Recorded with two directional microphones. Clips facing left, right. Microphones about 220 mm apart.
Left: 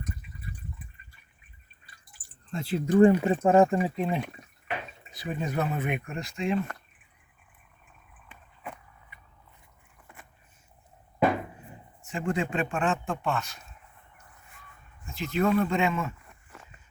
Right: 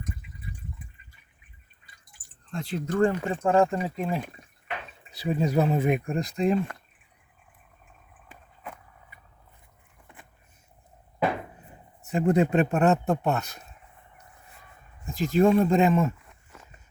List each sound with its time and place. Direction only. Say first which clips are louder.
2.5 s speech: left 4 dB; 5° left (ahead or behind)
3.8 s speech: left 1 dB; centre (ahead or behind)
5.3 s speech: right 6 dB; 30° right (ahead or behind)
12.0 s speech: right 7 dB; 40° right (ahead or behind)
15.0 s speech: right 6 dB; 40° right (ahead or behind)